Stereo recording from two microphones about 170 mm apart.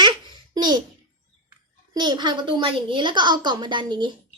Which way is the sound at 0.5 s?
25° right (ahead or behind).